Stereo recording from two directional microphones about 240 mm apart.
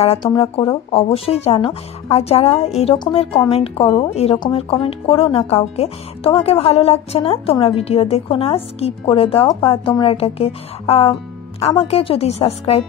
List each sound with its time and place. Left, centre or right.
0.0 s speech: left